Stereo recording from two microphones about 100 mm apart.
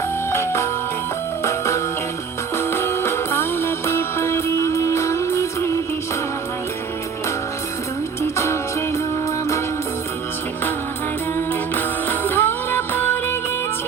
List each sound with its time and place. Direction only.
0.3 s music: 25° left (ahead or behind)
11.3 s music: 20° left (ahead or behind)